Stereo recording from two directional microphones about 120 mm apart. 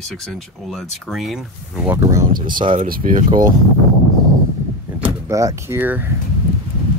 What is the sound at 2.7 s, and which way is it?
Speech, 90° right.